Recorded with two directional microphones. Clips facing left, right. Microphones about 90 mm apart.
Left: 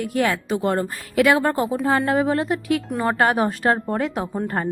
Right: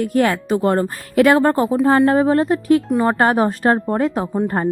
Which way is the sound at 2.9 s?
25° right (ahead or behind).